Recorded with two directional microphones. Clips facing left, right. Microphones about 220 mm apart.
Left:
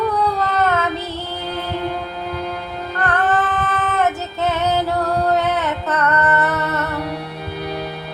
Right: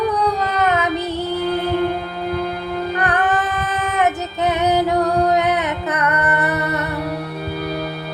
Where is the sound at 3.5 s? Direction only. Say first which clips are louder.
Left 1 dB; 15° right (ahead or behind).